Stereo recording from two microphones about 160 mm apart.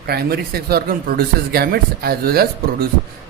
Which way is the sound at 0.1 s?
75° right (ahead or behind).